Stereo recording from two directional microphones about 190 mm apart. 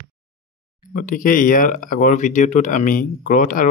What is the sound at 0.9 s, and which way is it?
Speech, 45° left (ahead or behind).